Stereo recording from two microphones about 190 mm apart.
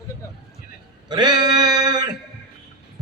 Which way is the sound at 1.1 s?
25° right (ahead or behind).